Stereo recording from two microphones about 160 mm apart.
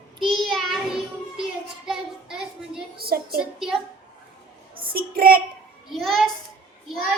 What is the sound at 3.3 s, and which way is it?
Speech, centre (ahead or behind).